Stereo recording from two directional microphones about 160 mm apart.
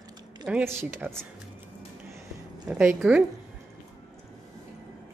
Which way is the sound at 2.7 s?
10° right (ahead or behind).